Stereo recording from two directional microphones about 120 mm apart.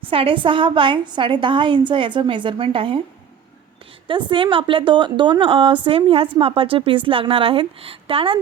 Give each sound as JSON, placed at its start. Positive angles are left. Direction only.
{"t": 0.1, "sound": "a woman's voice", "side_deg": -50}
{"t": 4.1, "sound": "a woman's voice", "side_deg": -45}